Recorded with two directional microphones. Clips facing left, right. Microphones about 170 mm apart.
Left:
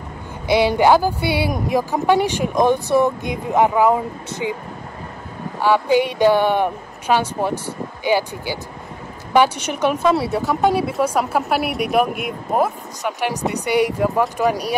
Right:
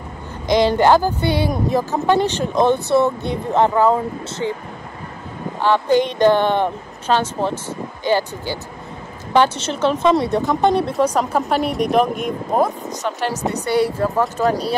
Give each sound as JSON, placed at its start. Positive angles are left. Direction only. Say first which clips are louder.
{"t": 0.5, "sound": "speech", "louder": "even", "side_deg": 10}
{"t": 5.6, "sound": "speech", "louder": "even", "side_deg": 10}